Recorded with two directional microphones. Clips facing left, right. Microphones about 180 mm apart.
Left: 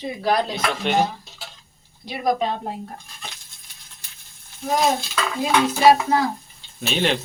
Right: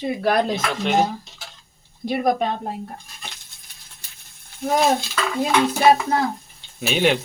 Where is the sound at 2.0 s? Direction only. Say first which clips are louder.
Right 2 dB; 55° right (ahead or behind).